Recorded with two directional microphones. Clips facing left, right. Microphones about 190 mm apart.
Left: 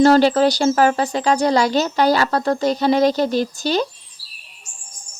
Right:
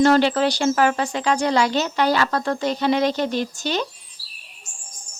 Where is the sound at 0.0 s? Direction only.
35° left (ahead or behind).